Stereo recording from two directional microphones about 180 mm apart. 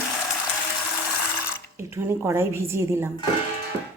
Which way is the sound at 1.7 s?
15° right (ahead or behind).